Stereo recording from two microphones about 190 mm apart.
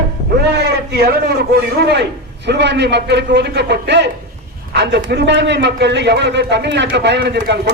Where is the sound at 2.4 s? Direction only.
65° right (ahead or behind).